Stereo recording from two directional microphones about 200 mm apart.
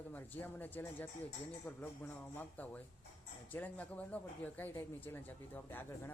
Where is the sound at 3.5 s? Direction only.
10° left (ahead or behind).